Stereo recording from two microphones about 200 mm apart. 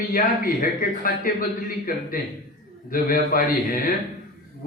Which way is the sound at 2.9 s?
45° left (ahead or behind).